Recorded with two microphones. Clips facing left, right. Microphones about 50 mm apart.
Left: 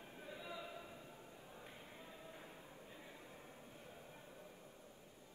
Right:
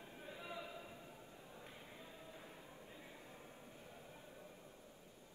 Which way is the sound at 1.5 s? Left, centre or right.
Left.